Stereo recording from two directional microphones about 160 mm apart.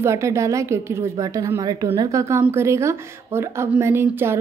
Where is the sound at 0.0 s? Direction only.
15° right (ahead or behind).